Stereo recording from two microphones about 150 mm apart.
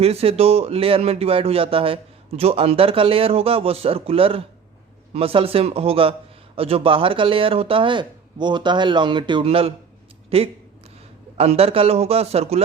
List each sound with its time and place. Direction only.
0.0 s speech: 40° right (ahead or behind)